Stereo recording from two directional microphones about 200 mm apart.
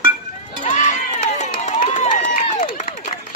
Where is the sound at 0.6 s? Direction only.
35° left (ahead or behind).